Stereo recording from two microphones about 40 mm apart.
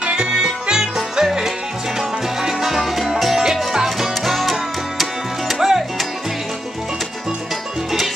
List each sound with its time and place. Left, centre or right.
0.0 s music: right